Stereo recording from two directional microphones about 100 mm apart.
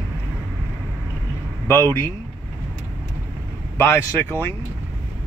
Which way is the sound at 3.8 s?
25° left (ahead or behind).